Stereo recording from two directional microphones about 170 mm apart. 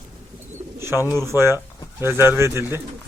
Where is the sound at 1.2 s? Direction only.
15° right (ahead or behind).